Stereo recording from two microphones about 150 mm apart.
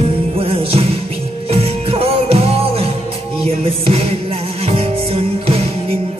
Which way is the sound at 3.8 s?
40° right (ahead or behind).